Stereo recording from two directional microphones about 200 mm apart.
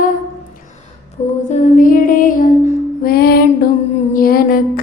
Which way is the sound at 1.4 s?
40° left (ahead or behind).